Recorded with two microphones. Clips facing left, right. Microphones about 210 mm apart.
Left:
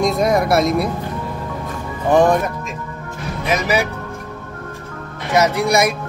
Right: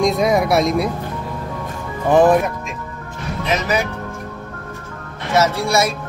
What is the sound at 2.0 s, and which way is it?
Speech, 5° right (ahead or behind).